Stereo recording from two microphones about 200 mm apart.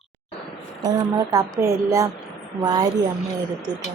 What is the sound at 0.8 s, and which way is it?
A woman's voice, 15° right (ahead or behind).